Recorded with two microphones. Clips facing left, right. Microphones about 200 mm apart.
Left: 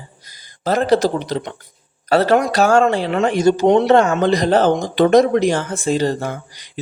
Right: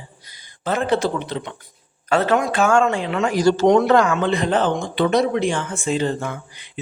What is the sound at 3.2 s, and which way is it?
Speech, 25° left (ahead or behind).